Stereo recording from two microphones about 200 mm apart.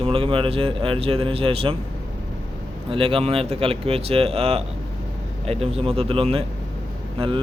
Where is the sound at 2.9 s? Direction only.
30° right (ahead or behind).